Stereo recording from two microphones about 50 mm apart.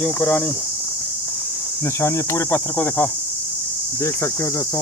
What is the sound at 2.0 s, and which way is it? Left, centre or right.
Speech, left.